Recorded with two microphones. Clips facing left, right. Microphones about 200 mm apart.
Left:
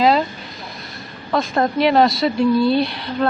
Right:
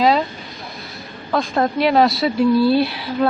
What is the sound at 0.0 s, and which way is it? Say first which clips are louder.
Speech: even; centre (ahead or behind).